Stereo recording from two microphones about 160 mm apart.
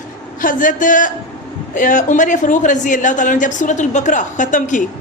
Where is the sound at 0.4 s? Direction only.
55° left (ahead or behind).